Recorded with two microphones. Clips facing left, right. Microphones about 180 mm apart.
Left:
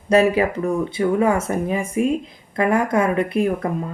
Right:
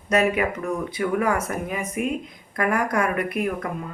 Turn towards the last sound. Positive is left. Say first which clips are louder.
# left 5 dB
turn(degrees=30)  # may be behind; listen again after turning